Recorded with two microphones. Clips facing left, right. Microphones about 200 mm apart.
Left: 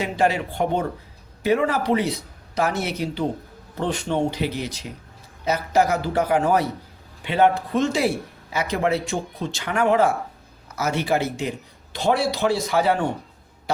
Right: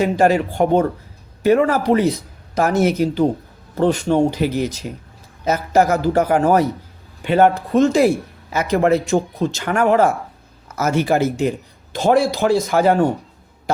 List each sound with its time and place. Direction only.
0.0 s speech: 45° right (ahead or behind)